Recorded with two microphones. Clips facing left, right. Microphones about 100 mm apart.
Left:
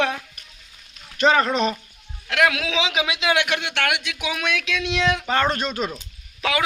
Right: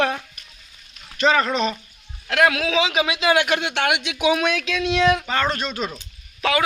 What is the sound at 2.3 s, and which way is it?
A man's voice, centre (ahead or behind).